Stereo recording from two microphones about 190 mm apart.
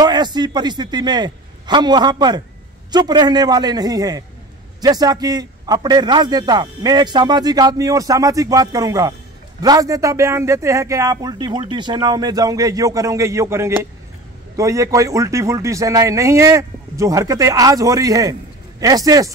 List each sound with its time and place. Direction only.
0.0 s a man's voice: 20° right (ahead or behind)